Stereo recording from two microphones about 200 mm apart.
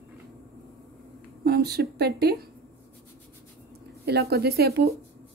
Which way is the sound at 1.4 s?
50° right (ahead or behind).